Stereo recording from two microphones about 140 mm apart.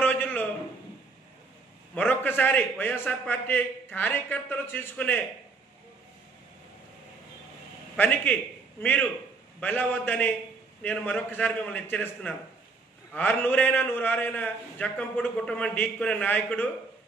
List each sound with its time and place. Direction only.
0.0 s a sound: 10° left (ahead or behind)
2.0 s a man's voice: 15° left (ahead or behind)
7.9 s a man's voice: 10° left (ahead or behind)